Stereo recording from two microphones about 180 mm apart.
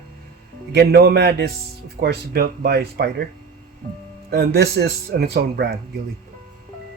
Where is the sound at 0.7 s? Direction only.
60° right (ahead or behind).